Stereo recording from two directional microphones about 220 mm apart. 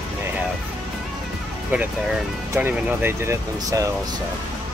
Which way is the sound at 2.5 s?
10° right (ahead or behind).